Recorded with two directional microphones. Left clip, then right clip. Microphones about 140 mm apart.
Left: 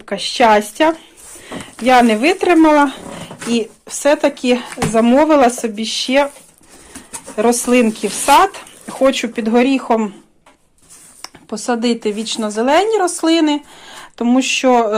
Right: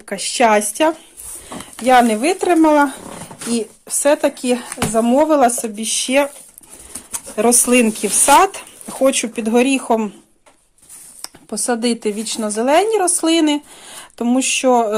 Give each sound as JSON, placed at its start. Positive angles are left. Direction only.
{"t": 0.0, "sound": "speech", "side_deg": -30}
{"t": 7.3, "sound": "speech", "side_deg": -40}
{"t": 8.3, "sound": "a sound", "side_deg": -35}
{"t": 9.2, "sound": "speech", "side_deg": -40}
{"t": 11.2, "sound": "speech", "side_deg": -45}
{"t": 14.3, "sound": "speech", "side_deg": -25}